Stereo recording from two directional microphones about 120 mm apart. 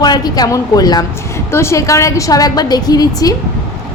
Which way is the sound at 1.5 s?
20° left (ahead or behind).